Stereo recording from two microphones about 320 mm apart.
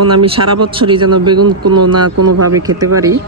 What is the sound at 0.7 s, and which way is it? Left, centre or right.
Speech, centre.